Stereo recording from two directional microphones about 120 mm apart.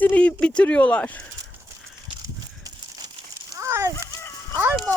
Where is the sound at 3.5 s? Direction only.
25° right (ahead or behind).